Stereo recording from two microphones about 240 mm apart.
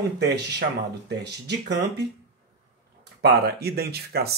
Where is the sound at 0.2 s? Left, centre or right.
Right.